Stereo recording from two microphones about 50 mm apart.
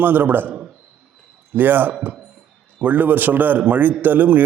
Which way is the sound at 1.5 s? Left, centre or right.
Right.